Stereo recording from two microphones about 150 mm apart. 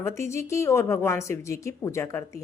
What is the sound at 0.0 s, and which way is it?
A woman's voice, 20° left (ahead or behind).